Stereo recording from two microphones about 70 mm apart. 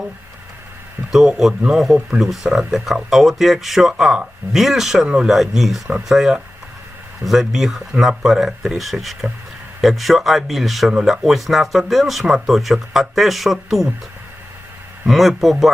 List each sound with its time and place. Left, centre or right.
1.6 s speech: centre
5.0 s speech: centre
5.3 s speech: centre
15.0 s speech: centre